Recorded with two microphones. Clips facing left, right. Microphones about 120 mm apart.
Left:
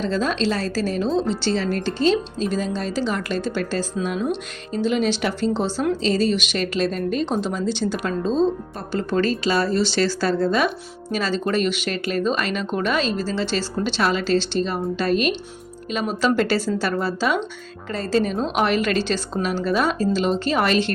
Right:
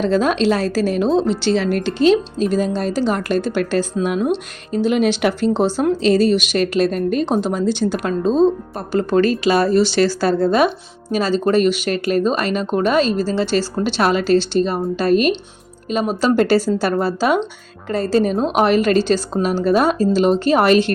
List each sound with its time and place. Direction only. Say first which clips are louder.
0.0 s speech: right 6 dB; 60° right (ahead or behind)
1.3 s speech: right 5 dB; 15° right (ahead or behind)
2.0 s a woman's voice: right 6 dB; 50° right (ahead or behind)